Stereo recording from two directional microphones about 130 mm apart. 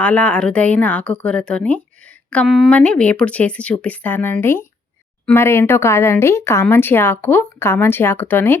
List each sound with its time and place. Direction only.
0.0 s speech: 10° left (ahead or behind)